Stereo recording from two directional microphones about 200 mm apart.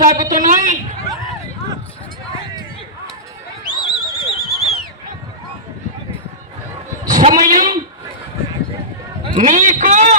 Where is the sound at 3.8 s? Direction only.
Centre (ahead or behind).